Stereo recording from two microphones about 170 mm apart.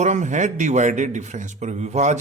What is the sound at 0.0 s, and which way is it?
A man's voice, 45° right (ahead or behind).